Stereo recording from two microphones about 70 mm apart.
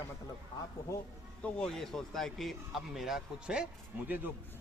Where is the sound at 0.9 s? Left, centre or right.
Left.